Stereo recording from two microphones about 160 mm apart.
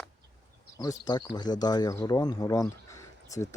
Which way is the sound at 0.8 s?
25° left (ahead or behind).